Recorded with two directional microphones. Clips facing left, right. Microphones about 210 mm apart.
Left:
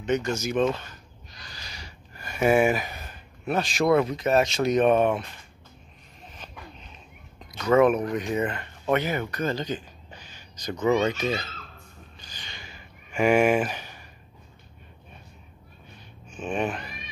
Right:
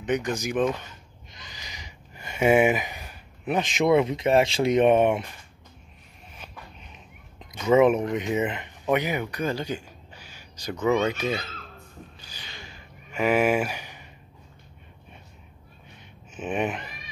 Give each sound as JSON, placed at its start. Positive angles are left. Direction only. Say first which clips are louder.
{"t": 0.0, "sound": "speech", "louder": "left 1 dB", "side_deg": -15}
{"t": 6.3, "sound": "a sound", "louder": "left 1 dB", "side_deg": -10}
{"t": 7.5, "sound": "speech", "louder": "right 1 dB", "side_deg": -10}
{"t": 7.8, "sound": "speech", "louder": "right 1 dB", "side_deg": -25}
{"t": 12.2, "sound": "a sound", "louder": "right 1 dB", "side_deg": -10}
{"t": 16.3, "sound": "speech", "louder": "right 1 dB", "side_deg": -20}